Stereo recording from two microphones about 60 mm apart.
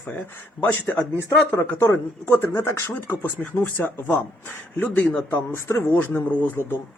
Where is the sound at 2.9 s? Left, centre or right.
Left.